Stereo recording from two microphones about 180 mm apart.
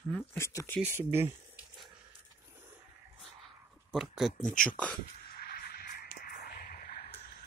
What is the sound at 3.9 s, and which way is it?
Speech, centre (ahead or behind).